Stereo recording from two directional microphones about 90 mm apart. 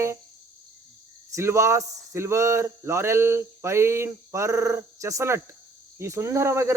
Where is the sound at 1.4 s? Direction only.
30° right (ahead or behind).